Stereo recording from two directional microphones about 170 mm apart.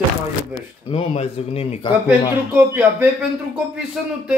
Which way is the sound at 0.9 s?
35° left (ahead or behind).